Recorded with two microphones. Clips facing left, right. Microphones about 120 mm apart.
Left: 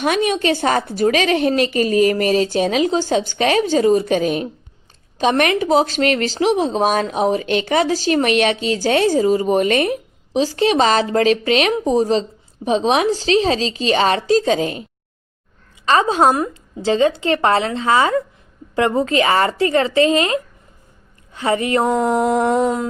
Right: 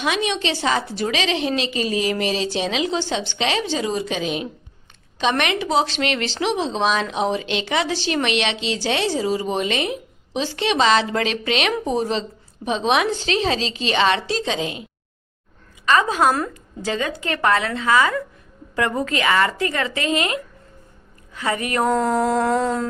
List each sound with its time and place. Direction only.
0.0 s a woman's voice: 45° left (ahead or behind)
5.2 s a woman's voice: 35° left (ahead or behind)
5.5 s a woman's voice: 45° left (ahead or behind)
10.3 s a woman's voice: 35° left (ahead or behind)
15.9 s a woman's voice: 30° left (ahead or behind)